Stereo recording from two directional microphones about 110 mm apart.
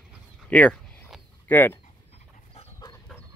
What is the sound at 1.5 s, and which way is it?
Speech, 20° left (ahead or behind).